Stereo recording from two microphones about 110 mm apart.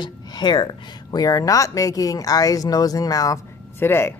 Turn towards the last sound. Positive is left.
turn(degrees=20)  # may be behind; listen again after turning